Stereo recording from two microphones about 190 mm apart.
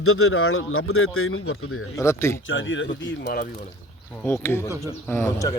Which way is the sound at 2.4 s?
85° left.